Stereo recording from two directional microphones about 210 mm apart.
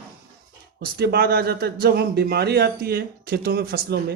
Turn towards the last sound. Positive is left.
turn(degrees=-50)  # may be behind; listen again after turning